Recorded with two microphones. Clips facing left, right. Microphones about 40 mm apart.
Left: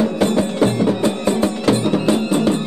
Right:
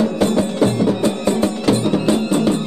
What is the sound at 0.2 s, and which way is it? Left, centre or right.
Music, left.